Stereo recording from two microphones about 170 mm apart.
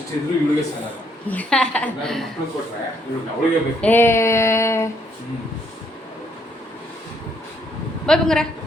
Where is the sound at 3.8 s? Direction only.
10° left (ahead or behind).